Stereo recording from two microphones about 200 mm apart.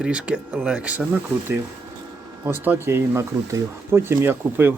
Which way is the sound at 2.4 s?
10° right (ahead or behind).